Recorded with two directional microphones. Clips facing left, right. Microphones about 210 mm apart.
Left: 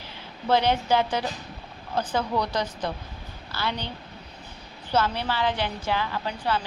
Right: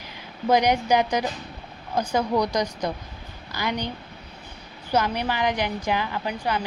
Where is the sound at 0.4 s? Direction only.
15° right (ahead or behind).